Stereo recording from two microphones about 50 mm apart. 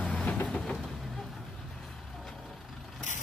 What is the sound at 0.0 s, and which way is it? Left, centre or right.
Train, left.